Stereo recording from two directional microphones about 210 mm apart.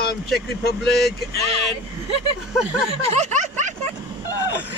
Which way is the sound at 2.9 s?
30° right (ahead or behind).